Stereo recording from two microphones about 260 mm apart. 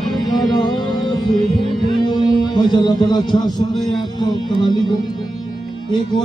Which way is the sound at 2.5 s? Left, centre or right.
Centre.